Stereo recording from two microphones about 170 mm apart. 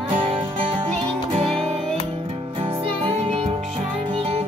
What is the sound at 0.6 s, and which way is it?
Music, 30° right (ahead or behind).